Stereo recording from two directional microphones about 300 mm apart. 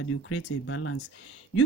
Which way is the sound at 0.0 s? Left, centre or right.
Left.